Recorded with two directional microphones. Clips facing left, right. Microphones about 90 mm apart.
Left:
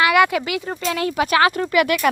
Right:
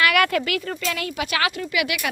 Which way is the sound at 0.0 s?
20° left (ahead or behind).